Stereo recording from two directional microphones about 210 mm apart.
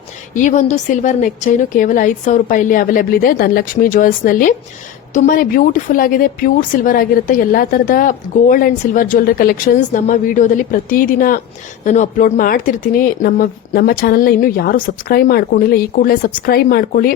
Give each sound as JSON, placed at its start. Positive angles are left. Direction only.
{"t": 0.3, "sound": "a woman's voice", "side_deg": 35}